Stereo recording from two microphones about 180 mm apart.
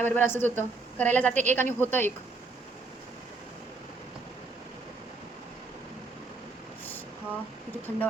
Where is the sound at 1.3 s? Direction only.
45° right (ahead or behind).